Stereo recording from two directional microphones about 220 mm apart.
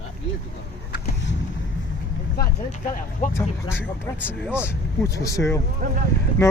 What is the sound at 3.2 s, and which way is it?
Speech, 40° left (ahead or behind).